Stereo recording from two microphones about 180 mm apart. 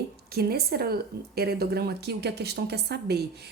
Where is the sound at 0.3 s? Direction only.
60° right (ahead or behind).